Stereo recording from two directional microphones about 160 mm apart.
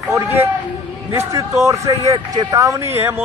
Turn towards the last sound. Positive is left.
turn(degrees=-15)  # may be behind; listen again after turning